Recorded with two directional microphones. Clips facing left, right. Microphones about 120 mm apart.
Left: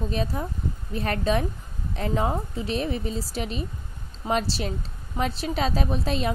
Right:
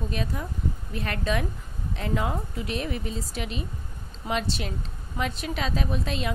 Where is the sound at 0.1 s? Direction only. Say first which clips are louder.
Left 3 dB; 30° left (ahead or behind).